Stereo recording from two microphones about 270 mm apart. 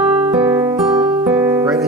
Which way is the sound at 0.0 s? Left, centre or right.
Centre.